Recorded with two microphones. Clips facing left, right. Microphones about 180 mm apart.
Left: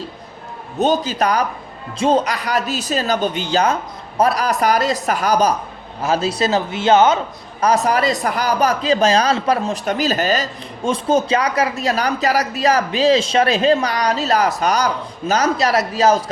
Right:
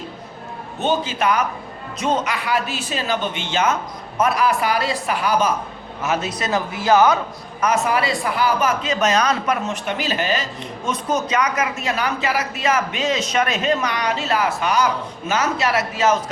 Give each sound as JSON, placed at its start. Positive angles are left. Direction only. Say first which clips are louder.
{"t": 0.8, "sound": "a man's voice", "louder": "left 4 dB", "side_deg": 40}
{"t": 7.6, "sound": "a man's voice", "louder": "left 3 dB", "side_deg": 35}